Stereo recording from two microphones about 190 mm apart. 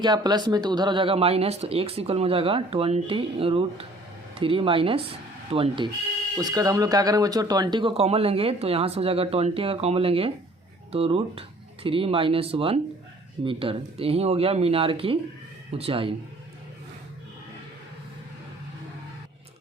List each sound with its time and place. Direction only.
0.0 s speech: 20° right (ahead or behind)